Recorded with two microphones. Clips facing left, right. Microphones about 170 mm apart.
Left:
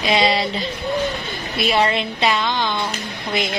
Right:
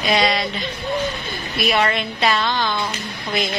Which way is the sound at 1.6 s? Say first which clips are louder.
Left 1 dB; 25° left (ahead or behind).